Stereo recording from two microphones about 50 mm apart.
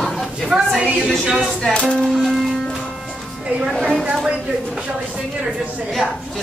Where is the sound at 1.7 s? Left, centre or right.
Left.